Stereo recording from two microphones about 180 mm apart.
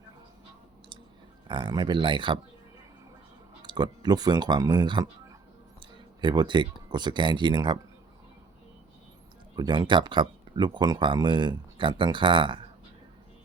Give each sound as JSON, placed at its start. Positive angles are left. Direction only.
{"t": 1.5, "sound": "speech", "side_deg": -25}
{"t": 3.6, "sound": "speech", "side_deg": -25}
{"t": 9.6, "sound": "speech", "side_deg": -25}